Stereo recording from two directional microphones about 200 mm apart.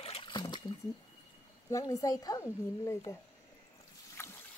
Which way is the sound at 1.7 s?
15° left (ahead or behind).